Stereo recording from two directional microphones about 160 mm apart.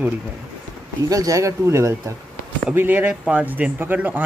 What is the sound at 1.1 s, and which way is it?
Speech, 20° right (ahead or behind).